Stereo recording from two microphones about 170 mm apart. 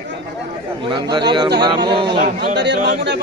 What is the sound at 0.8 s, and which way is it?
Speech, 30° right (ahead or behind).